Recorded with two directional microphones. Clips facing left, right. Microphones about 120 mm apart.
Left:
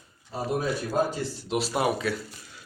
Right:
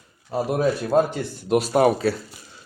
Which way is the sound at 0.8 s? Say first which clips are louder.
Right 6 dB; 55° right (ahead or behind).